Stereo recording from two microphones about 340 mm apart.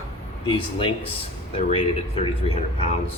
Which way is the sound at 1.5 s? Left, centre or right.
Centre.